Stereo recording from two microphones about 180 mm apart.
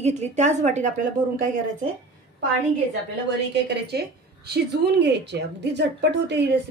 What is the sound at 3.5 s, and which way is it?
A woman's voice, 65° right (ahead or behind).